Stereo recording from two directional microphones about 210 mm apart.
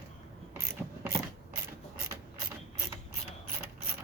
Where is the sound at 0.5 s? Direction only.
10° right (ahead or behind).